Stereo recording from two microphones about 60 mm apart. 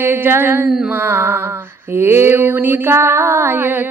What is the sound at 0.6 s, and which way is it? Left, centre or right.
Mantra, centre.